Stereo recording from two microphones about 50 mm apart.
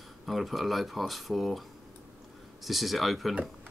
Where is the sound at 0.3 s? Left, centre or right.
Centre.